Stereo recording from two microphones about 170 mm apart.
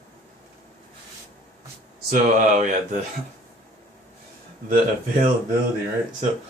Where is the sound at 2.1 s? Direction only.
55° right (ahead or behind).